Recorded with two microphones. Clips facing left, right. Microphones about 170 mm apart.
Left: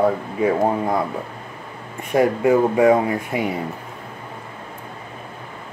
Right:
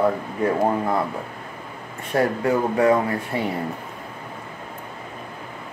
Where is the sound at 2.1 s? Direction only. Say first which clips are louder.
Left 4 dB; 20° left (ahead or behind).